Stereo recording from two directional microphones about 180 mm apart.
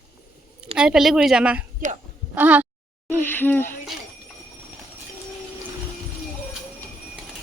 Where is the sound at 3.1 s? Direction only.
10° left (ahead or behind).